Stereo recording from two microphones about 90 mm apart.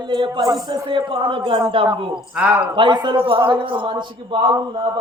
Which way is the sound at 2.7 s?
60° right (ahead or behind).